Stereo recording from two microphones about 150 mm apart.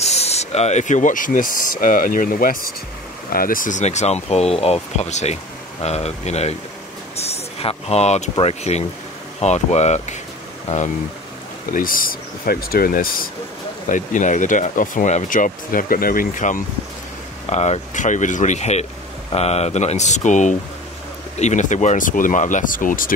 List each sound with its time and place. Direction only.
0.0 s speech: 45° left (ahead or behind)
11.7 s speech: 70° left (ahead or behind)
13.8 s speech: 60° left (ahead or behind)
17.5 s speech: 50° left (ahead or behind); by 23.1 s 65° left (ahead or behind)